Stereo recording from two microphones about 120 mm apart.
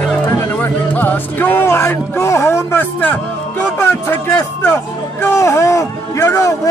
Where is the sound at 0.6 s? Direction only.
15° left (ahead or behind).